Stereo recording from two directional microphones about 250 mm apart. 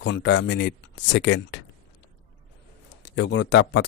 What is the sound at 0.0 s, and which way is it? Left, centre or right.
Speech, left.